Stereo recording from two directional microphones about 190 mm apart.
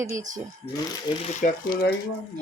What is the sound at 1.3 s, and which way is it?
Speech, 45° left (ahead or behind).